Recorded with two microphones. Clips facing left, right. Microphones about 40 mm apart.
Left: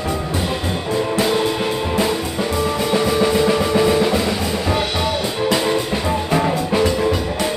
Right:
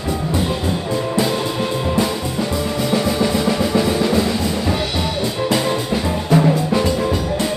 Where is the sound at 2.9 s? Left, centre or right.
Centre.